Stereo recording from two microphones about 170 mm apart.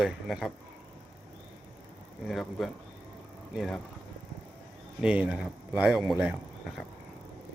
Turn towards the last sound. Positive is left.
turn(degrees=-5)  # may be behind; listen again after turning